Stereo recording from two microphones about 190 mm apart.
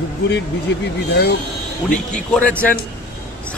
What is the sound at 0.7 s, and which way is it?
Speech, 65° left (ahead or behind).